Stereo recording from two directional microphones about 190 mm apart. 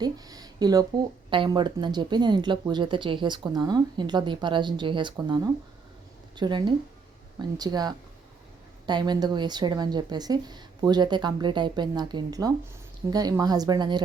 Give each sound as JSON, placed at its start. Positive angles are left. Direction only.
{"t": 0.0, "sound": "speech", "side_deg": -20}